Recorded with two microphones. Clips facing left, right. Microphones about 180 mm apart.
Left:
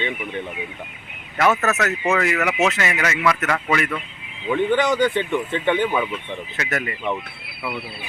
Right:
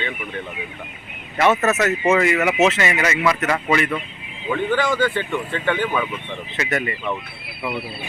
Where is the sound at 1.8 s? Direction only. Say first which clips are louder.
Right 3 dB; centre (ahead or behind).